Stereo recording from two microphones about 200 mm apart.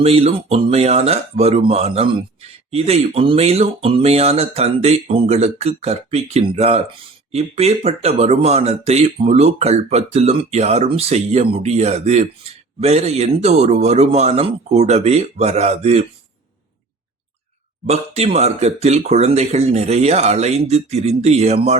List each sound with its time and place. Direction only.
0.0 s speech: 30° right (ahead or behind)
17.8 s speech: 30° right (ahead or behind)